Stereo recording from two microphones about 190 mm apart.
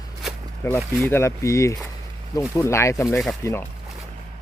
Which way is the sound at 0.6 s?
15° left (ahead or behind).